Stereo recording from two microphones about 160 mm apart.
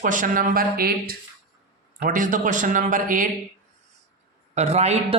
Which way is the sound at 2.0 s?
55° right (ahead or behind).